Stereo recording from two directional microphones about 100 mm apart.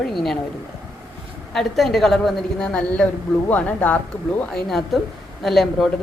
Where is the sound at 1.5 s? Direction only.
Centre (ahead or behind).